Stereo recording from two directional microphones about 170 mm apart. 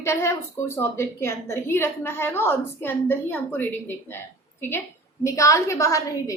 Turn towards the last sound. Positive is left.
turn(degrees=20)  # may be behind; listen again after turning